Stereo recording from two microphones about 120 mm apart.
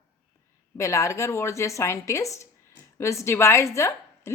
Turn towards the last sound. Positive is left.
turn(degrees=25)  # may be behind; listen again after turning